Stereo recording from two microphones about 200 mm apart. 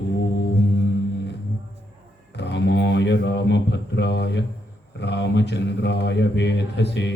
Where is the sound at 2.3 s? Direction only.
60° left (ahead or behind).